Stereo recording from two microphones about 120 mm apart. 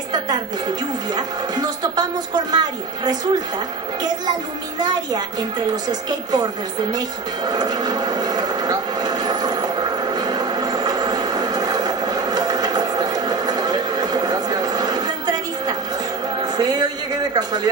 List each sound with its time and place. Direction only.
1.1 s speech: 35° right (ahead or behind)
7.4 s vehicle: 35° right (ahead or behind)
16.5 s a sound: 35° right (ahead or behind)